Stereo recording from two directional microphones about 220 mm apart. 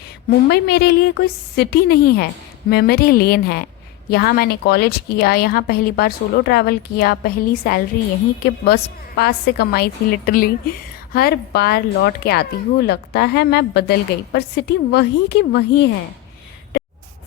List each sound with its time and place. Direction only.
0.3 s a woman's voice: 45° left (ahead or behind)